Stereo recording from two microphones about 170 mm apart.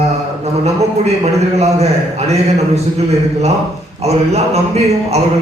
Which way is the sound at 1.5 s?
40° right (ahead or behind).